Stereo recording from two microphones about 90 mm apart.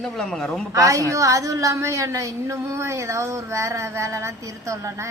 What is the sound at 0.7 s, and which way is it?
A woman's voice, 40° right (ahead or behind).